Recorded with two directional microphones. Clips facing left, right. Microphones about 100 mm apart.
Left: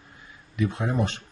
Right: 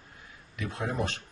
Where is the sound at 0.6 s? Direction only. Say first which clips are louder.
Left 7 dB; 15° left (ahead or behind).